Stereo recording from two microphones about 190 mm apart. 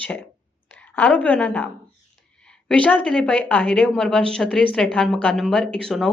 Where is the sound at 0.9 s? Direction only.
10° left (ahead or behind).